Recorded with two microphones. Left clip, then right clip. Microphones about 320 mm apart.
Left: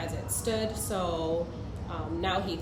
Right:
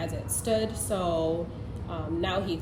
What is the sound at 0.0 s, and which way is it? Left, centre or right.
A woman's voice, centre.